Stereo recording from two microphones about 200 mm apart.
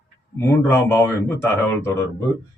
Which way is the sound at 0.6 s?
10° left (ahead or behind).